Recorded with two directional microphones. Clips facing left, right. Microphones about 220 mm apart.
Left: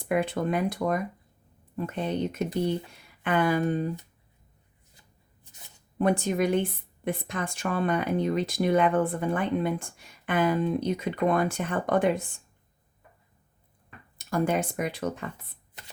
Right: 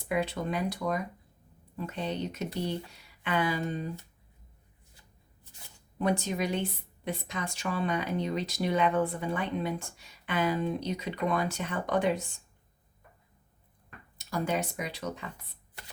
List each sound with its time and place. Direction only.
0.0 s speech: 50° left (ahead or behind)
2.0 s speech: 50° left (ahead or behind)
6.0 s speech: 50° left (ahead or behind)
14.2 s speech: 50° left (ahead or behind)